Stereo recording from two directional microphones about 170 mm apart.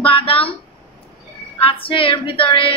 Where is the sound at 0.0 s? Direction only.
30° left (ahead or behind).